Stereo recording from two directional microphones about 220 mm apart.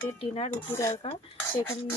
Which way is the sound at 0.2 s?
25° left (ahead or behind).